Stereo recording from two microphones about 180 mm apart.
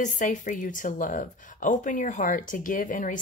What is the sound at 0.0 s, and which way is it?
Speech, 45° left (ahead or behind).